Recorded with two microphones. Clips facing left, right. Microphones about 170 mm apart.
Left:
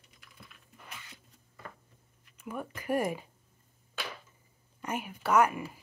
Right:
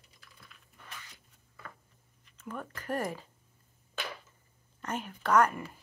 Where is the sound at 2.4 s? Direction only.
10° left (ahead or behind).